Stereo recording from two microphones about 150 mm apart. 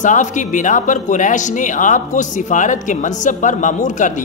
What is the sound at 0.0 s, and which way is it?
Speech, 55° left (ahead or behind).